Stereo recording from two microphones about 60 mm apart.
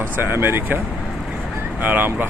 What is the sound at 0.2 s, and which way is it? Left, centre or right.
Speech, right.